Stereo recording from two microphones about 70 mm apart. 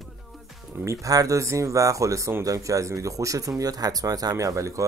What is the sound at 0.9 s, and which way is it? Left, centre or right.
Speech, right.